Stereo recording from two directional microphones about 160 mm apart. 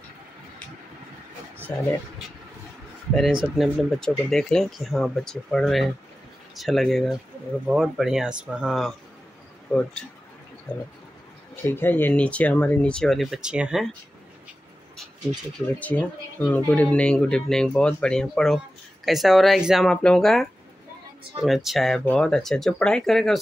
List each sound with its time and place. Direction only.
3.5 s speech: centre (ahead or behind)
11.6 s speech: 15° left (ahead or behind); by 13.8 s 5° right (ahead or behind)
15.8 s speech: 10° left (ahead or behind)